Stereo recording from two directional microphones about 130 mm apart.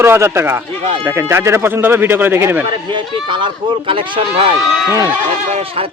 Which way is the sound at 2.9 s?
40° right (ahead or behind).